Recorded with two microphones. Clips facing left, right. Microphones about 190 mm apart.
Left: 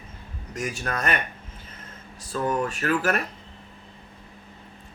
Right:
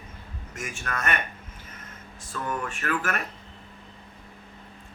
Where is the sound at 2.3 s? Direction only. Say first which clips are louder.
Left 6 dB; 35° left (ahead or behind).